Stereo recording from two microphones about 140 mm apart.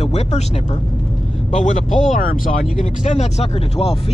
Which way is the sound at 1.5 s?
60° left (ahead or behind).